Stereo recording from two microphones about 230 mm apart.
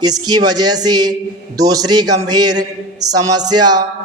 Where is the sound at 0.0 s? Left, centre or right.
Centre.